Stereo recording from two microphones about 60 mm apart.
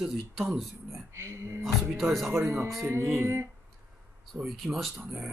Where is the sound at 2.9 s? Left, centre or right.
Right.